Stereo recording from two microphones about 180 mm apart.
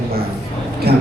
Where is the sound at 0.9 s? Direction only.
60° right (ahead or behind).